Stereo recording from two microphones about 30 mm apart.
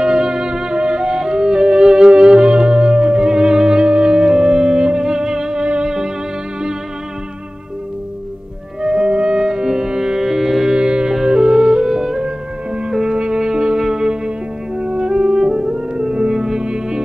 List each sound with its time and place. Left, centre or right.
0.0 s music: right
8.8 s music: right
9.4 s music: right
10.8 s music: right